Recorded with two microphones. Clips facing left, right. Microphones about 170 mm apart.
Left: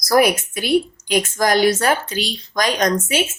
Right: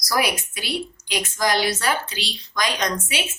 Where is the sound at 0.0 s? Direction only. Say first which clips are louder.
Left 8 dB; 50° left (ahead or behind).